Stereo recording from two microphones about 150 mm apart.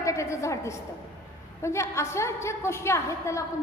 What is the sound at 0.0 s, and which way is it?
A woman's voice, 20° left (ahead or behind).